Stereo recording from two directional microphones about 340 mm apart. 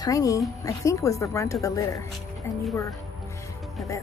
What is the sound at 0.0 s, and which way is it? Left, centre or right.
Speech, centre.